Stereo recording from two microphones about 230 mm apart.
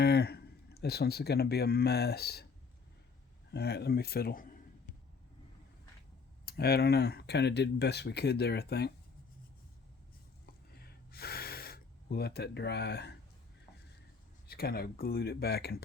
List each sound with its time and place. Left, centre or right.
0.0 s speech: left
3.5 s speech: left
6.4 s speech: left
10.8 s gasp: left
14.4 s speech: left